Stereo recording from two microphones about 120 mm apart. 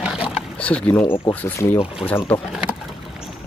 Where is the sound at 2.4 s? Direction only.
5° right (ahead or behind).